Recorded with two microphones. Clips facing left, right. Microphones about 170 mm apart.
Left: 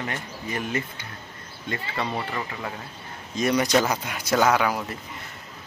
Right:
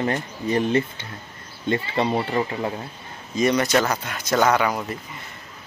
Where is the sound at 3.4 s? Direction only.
10° left (ahead or behind).